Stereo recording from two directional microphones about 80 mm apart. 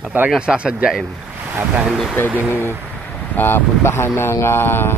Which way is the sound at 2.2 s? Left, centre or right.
Left.